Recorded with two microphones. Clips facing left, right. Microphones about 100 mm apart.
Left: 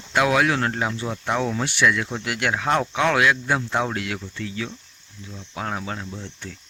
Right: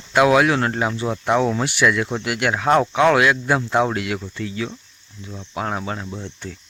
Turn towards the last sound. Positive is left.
turn(degrees=-35)  # may be behind; listen again after turning